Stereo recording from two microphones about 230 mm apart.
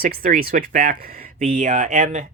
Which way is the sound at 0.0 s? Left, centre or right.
Right.